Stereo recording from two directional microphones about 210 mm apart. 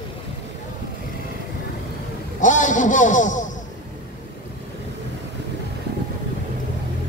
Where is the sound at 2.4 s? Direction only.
35° left (ahead or behind).